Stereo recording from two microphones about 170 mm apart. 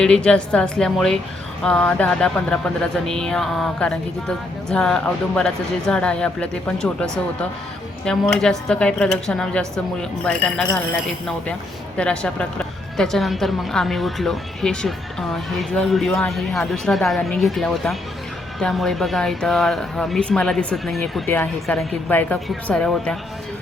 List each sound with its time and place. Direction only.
0.0 s a woman's voice: 5° left (ahead or behind)
11.9 s a woman's voice: 5° left (ahead or behind)